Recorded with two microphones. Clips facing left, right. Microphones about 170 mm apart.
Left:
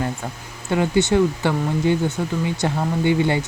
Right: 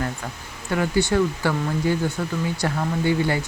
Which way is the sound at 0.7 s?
20° left (ahead or behind).